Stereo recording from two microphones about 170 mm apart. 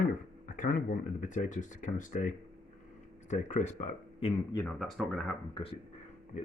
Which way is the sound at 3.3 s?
45° left (ahead or behind).